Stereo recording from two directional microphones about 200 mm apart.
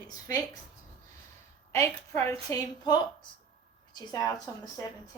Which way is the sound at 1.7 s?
15° left (ahead or behind).